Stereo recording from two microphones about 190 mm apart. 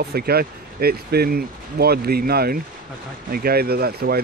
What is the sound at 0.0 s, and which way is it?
Speech, 55° right (ahead or behind).